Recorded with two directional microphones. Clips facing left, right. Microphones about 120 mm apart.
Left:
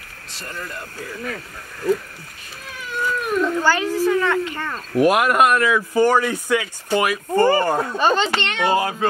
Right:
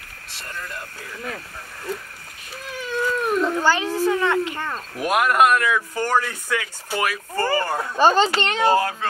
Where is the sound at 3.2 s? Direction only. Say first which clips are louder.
Left 1 dB; 30° right (ahead or behind).